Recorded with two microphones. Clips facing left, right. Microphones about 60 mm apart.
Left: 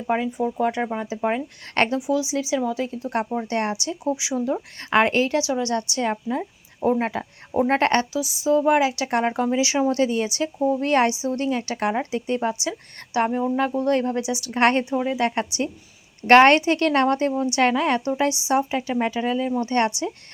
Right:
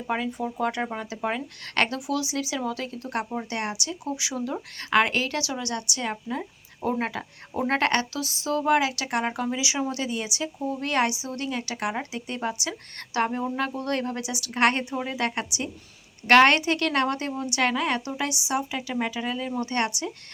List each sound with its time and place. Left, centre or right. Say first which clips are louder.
0.1 s a woman's voice: left 5 dB; centre
1.0 s a woman's voice: left 5 dB; left
8.1 s a woman's voice: left 7 dB; centre
13.1 s a woman's voice: left 4 dB; centre; by 20.1 s left